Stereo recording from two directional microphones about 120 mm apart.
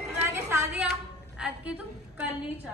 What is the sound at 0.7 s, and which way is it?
A woman's voice, 5° right (ahead or behind).